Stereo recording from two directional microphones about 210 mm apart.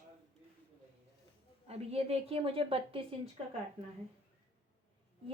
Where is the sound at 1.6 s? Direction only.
30° right (ahead or behind).